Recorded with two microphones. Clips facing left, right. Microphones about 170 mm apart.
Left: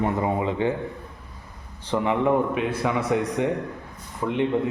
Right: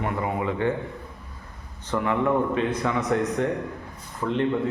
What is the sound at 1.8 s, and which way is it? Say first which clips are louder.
A man's voice: left 2 dB; 15° left (ahead or behind).